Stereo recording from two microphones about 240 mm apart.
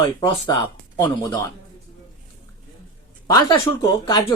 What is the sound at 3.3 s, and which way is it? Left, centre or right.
Speech, centre.